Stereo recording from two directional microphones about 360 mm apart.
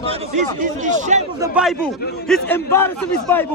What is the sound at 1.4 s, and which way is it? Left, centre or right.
Speech, centre.